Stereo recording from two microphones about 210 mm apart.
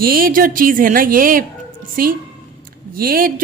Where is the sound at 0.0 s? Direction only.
45° right (ahead or behind).